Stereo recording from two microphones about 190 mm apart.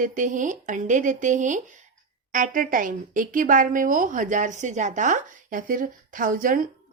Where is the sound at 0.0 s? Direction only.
45° right (ahead or behind).